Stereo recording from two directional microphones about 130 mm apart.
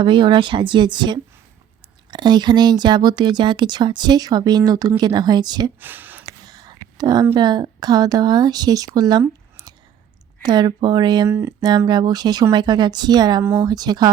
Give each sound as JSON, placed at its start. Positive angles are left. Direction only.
{"t": 0.0, "sound": "speech", "side_deg": -40}
{"t": 5.8, "sound": "a sound", "side_deg": -15}
{"t": 6.2, "sound": "whispering", "side_deg": -30}
{"t": 7.3, "sound": "a woman's voice", "side_deg": -35}
{"t": 11.3, "sound": "speech", "side_deg": -20}
{"t": 11.9, "sound": "speech", "side_deg": -35}
{"t": 13.4, "sound": "speech", "side_deg": -15}
{"t": 13.7, "sound": "speech", "side_deg": -30}